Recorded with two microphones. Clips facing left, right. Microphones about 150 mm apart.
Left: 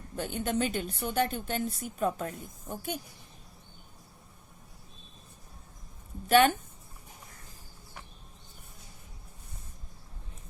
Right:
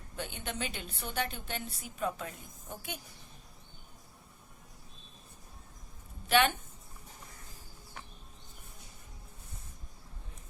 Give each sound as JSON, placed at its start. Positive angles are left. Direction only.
{"t": 0.2, "sound": "a woman's voice", "side_deg": 45}
{"t": 6.2, "sound": "a woman's voice", "side_deg": 45}